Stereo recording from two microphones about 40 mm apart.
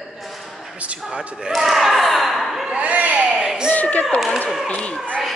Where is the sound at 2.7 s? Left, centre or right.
Right.